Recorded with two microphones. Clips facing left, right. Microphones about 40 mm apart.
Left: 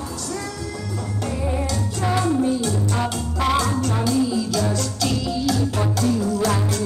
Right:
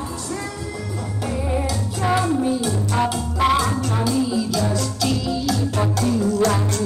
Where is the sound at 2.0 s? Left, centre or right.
Centre.